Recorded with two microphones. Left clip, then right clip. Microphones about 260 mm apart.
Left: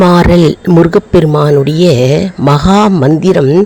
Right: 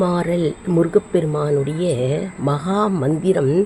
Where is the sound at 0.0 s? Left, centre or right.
Left.